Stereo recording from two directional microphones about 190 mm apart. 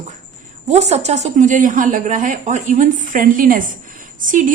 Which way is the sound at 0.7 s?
35° right (ahead or behind).